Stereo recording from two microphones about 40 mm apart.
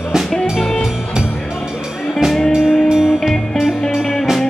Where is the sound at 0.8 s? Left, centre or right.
Centre.